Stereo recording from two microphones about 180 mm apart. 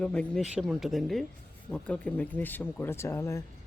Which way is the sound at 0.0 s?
5° left (ahead or behind).